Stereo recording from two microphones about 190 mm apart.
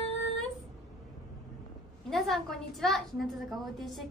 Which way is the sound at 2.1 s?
Centre (ahead or behind).